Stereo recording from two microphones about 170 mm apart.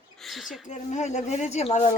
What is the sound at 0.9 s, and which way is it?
Speech, 45° left (ahead or behind).